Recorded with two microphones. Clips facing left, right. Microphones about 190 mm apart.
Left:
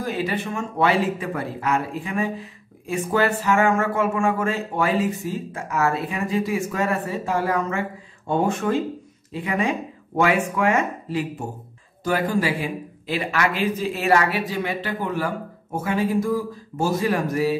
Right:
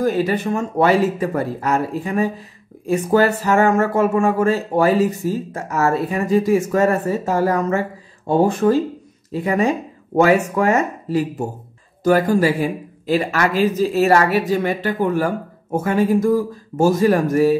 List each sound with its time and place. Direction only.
0.0 s speech: 45° right (ahead or behind)